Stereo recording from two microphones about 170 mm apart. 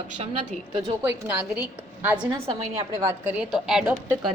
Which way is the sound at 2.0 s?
10° right (ahead or behind).